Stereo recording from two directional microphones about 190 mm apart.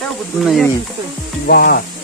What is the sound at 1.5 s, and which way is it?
Music, 55° left (ahead or behind).